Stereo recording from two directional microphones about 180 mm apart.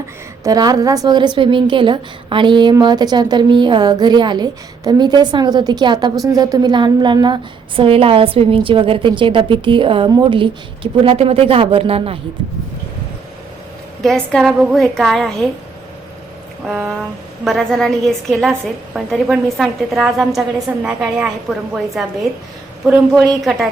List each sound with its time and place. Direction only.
0.4 s a woman's voice: 20° right (ahead or behind)
14.0 s a woman's voice: centre (ahead or behind)
16.6 s a sound: 5° right (ahead or behind)
17.4 s a woman's voice: centre (ahead or behind)